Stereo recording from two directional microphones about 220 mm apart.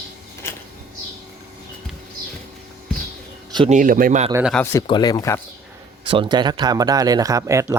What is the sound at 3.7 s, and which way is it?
Speech, 35° right (ahead or behind).